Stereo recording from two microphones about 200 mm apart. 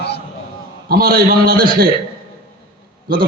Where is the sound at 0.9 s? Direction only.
50° right (ahead or behind).